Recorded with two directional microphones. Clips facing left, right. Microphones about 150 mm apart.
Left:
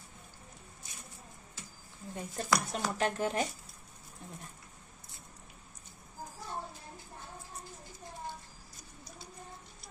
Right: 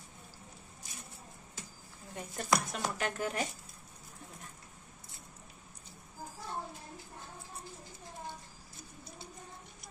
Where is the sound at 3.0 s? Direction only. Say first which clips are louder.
Left 5 dB; 30° left (ahead or behind).